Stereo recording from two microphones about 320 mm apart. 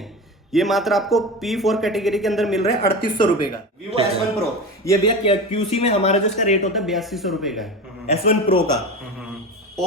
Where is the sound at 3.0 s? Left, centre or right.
Centre.